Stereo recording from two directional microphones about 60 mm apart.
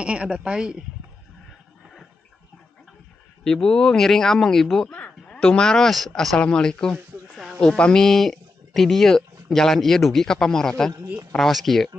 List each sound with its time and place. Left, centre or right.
0.0 s speech: centre
3.4 s speech: centre
4.9 s speech: left; by 11.9 s centre